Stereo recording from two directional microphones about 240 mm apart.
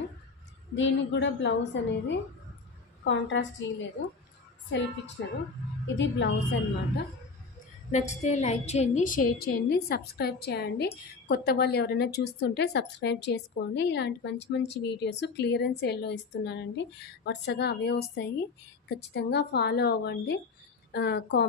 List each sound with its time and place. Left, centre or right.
0.7 s a woman's voice: left
7.9 s a woman's voice: left